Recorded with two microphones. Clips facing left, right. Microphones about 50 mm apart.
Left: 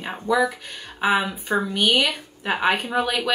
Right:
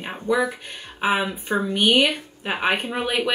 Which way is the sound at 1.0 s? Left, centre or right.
Right.